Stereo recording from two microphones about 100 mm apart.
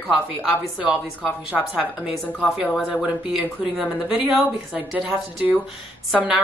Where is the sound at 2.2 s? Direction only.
10° left (ahead or behind).